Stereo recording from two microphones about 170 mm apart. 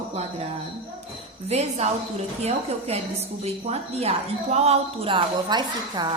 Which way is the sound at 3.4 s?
40° right (ahead or behind).